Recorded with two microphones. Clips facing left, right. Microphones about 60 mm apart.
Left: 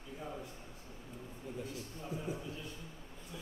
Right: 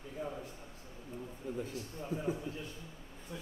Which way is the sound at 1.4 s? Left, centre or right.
Right.